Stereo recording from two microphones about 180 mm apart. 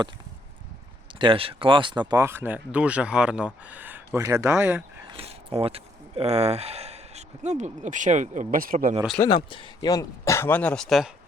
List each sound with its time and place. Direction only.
1.2 s speech: 30° right (ahead or behind); by 4.8 s 5° right (ahead or behind)
5.0 s speech: 30° right (ahead or behind); by 9.0 s 50° right (ahead or behind)
9.2 s speech: 25° left (ahead or behind); by 11.1 s centre (ahead or behind)